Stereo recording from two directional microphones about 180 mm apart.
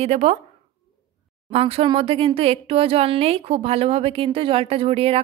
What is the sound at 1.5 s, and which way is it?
Speech, 30° right (ahead or behind).